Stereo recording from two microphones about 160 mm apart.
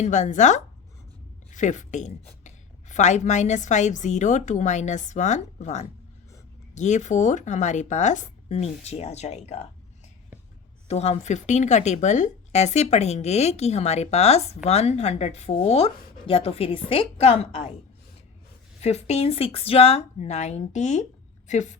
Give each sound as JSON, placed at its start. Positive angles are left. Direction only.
{"t": 0.0, "sound": "speech", "side_deg": 45}
{"t": 10.8, "sound": "a woman's voice", "side_deg": 40}
{"t": 18.8, "sound": "speech", "side_deg": 40}